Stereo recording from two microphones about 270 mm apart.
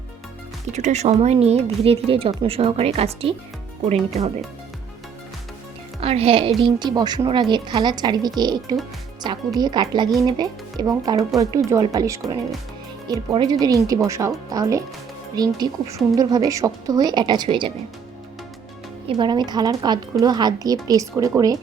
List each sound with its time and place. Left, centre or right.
0.7 s speech: right
6.0 s a woman's voice: right
19.0 s a woman's voice: centre